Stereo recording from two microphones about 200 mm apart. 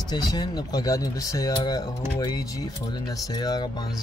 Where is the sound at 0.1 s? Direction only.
20° left (ahead or behind).